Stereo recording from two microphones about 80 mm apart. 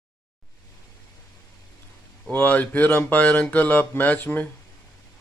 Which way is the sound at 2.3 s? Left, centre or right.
Centre.